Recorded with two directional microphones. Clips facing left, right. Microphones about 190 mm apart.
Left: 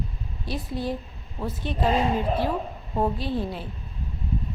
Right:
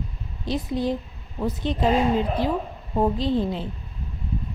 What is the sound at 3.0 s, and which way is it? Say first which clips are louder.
Speech: right 4 dB; 20° right (ahead or behind).